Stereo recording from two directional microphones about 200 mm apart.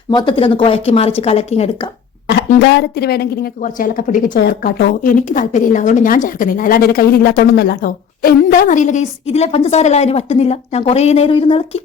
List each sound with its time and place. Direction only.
0.1 s speech: 20° left (ahead or behind)
2.6 s a woman's voice: 60° left (ahead or behind); by 11.8 s 25° left (ahead or behind)